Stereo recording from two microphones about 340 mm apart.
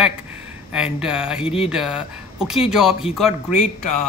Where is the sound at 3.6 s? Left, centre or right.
Left.